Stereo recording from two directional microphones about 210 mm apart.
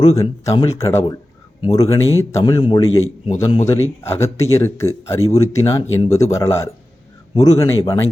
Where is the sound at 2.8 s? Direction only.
75° left (ahead or behind).